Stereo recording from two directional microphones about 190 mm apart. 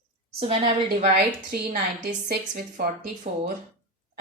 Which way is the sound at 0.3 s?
30° right (ahead or behind).